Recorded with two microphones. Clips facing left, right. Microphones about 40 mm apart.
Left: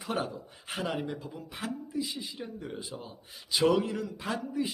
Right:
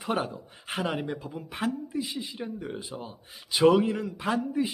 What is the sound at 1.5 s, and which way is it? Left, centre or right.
Speech, right.